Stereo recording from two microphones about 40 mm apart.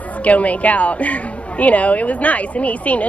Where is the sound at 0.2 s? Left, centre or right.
Left.